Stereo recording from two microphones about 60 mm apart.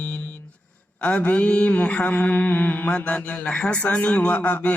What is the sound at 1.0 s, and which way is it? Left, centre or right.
Mantra, left.